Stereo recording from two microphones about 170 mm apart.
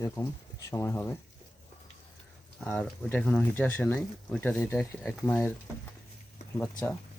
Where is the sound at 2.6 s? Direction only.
5° left (ahead or behind).